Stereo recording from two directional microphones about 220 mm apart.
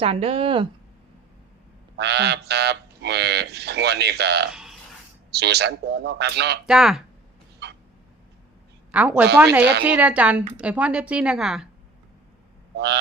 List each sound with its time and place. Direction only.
0.0 s speech: 25° right (ahead or behind)
2.0 s speech: 50° right (ahead or behind)
4.5 s a sound: centre (ahead or behind)
5.3 s speech: 50° right (ahead or behind)
6.7 s a woman's voice: centre (ahead or behind)
8.9 s a woman's voice: 5° right (ahead or behind)
12.7 s speech: 50° right (ahead or behind)